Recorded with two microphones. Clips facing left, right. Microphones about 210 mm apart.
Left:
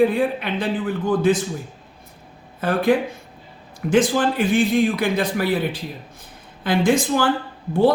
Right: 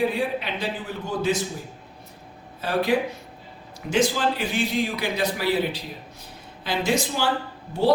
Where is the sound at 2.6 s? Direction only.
55° left (ahead or behind).